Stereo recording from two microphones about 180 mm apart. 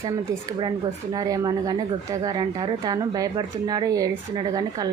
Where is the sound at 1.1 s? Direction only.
20° right (ahead or behind).